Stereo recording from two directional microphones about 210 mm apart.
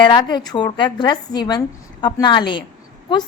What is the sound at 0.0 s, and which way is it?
A woman's voice, 20° left (ahead or behind).